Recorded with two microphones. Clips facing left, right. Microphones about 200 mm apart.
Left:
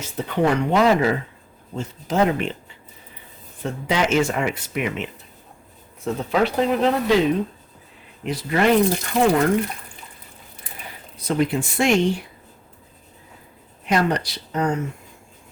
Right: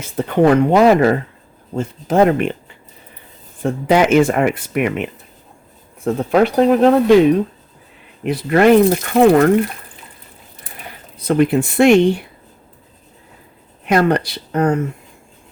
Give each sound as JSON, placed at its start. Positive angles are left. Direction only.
{"t": 0.0, "sound": "speech", "side_deg": -55}
{"t": 3.6, "sound": "speech", "side_deg": -55}
{"t": 8.2, "sound": "speech", "side_deg": -60}
{"t": 11.3, "sound": "speech", "side_deg": -60}
{"t": 13.8, "sound": "speech", "side_deg": -60}